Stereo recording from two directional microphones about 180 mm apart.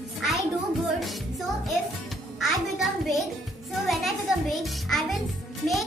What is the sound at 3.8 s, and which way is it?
A woman's voice, centre (ahead or behind).